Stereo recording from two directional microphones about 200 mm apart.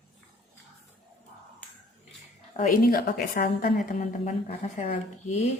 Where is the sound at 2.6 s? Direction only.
45° left (ahead or behind).